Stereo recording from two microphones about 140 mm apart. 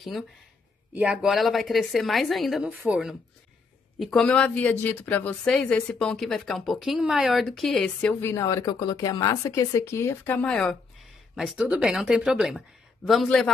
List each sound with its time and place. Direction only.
0.9 s speech: 10° right (ahead or behind)
8.2 s speech: 20° left (ahead or behind)
11.3 s speech: 5° right (ahead or behind)